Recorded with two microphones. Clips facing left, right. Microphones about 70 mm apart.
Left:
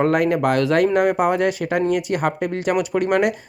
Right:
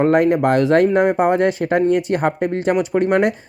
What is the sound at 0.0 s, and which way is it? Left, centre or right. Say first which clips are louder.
Speech: right 3 dB; right.